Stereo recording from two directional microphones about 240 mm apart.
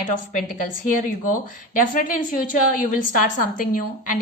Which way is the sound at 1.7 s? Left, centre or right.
Left.